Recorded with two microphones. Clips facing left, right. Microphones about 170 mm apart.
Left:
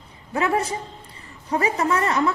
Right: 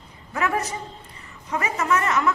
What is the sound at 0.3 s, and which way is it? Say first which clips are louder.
A man's voice: left 3 dB; 30° left (ahead or behind).